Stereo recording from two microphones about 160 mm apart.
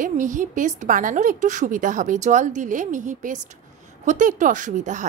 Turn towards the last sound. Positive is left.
turn(degrees=-50)  # may be behind; listen again after turning